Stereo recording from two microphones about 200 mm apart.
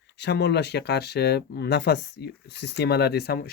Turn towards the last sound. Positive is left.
turn(degrees=50)  # may be behind; listen again after turning